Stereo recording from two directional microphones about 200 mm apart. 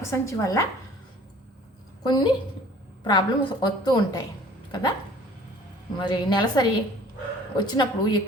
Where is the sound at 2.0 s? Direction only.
20° left (ahead or behind).